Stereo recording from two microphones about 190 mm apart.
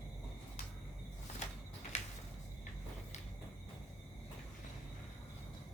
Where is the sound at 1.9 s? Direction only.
35° left (ahead or behind).